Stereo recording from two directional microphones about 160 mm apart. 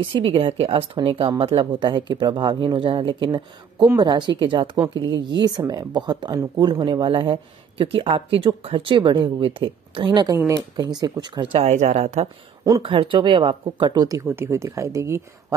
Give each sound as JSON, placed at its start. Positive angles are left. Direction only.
{"t": 0.0, "sound": "speech", "side_deg": -35}
{"t": 11.6, "sound": "speech", "side_deg": -45}
{"t": 12.8, "sound": "speech", "side_deg": -35}